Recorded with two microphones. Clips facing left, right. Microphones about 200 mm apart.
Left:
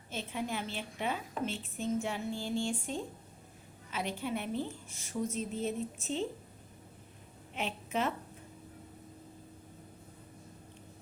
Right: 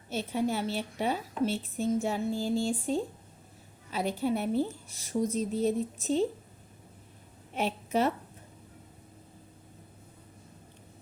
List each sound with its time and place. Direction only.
0.1 s a woman's voice: 40° right (ahead or behind)
7.5 s a woman's voice: 40° right (ahead or behind)